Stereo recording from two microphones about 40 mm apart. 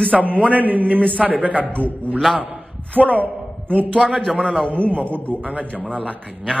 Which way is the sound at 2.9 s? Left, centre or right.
Left.